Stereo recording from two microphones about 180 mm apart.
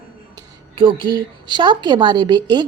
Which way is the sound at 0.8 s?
25° right (ahead or behind).